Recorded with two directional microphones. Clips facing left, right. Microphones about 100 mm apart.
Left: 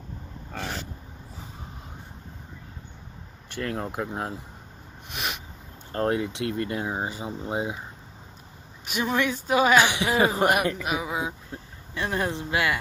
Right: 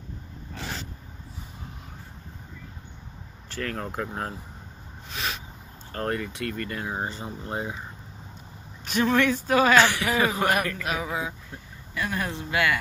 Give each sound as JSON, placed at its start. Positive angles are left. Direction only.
{"t": 3.4, "sound": "speech", "side_deg": 15}
{"t": 5.1, "sound": "a sound", "side_deg": 15}
{"t": 5.9, "sound": "speech", "side_deg": 20}
{"t": 8.8, "sound": "speech", "side_deg": 15}
{"t": 10.4, "sound": "speech", "side_deg": 15}
{"t": 11.1, "sound": "speech", "side_deg": 25}